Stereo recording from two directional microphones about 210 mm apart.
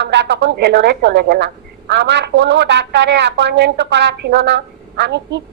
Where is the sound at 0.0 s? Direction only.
55° right (ahead or behind).